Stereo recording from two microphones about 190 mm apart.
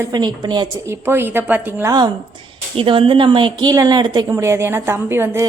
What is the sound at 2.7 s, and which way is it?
A woman's voice, 30° right (ahead or behind).